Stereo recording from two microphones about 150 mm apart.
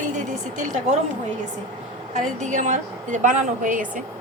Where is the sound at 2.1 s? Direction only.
55° right (ahead or behind).